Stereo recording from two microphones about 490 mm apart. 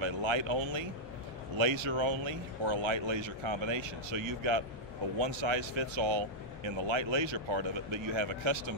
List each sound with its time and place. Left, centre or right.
0.0 s speech: right